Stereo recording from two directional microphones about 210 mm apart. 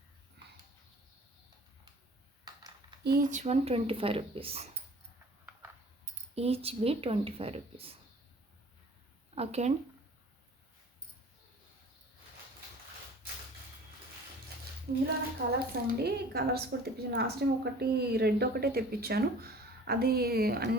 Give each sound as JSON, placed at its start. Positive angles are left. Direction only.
{"t": 3.0, "sound": "speech", "side_deg": -40}
{"t": 6.3, "sound": "speech", "side_deg": -30}
{"t": 9.3, "sound": "speech", "side_deg": -30}
{"t": 15.5, "sound": "a woman's voice", "side_deg": -45}